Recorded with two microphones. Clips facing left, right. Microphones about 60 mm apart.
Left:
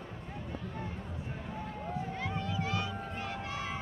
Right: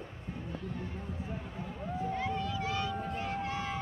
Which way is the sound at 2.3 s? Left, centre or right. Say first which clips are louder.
Right 1 dB; left.